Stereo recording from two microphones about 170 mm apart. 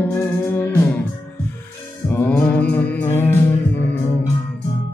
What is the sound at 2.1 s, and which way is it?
Music, 10° left (ahead or behind).